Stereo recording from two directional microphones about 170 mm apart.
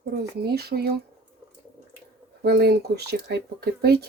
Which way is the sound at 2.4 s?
70° right (ahead or behind).